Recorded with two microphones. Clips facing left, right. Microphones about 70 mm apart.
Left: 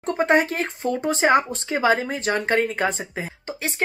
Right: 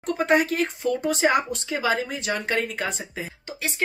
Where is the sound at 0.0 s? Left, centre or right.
Left.